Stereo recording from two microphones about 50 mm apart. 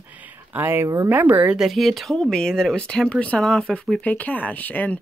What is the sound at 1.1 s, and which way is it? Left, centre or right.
Speech, right.